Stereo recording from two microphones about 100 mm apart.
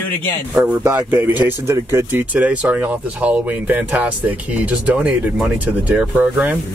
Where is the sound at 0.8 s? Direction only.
20° right (ahead or behind).